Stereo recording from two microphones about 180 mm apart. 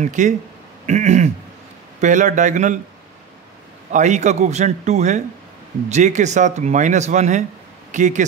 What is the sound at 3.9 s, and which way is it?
A man's voice, 40° right (ahead or behind).